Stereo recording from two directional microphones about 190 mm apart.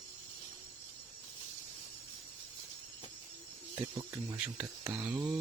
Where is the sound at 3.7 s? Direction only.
20° right (ahead or behind).